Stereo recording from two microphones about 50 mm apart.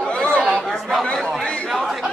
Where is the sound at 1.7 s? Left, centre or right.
Centre.